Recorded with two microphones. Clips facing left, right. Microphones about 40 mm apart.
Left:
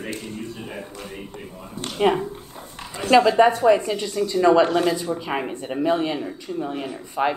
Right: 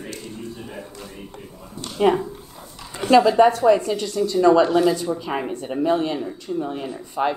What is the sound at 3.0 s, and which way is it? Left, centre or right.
Speech, centre.